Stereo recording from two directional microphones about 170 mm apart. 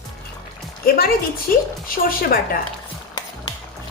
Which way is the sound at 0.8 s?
65° left (ahead or behind).